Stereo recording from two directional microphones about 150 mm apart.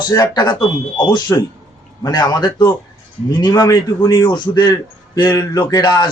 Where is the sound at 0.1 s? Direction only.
30° left (ahead or behind).